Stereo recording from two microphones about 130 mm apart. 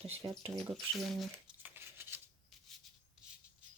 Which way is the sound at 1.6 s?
15° right (ahead or behind).